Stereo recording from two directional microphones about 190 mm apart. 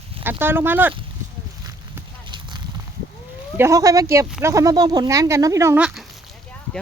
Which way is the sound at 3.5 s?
15° right (ahead or behind).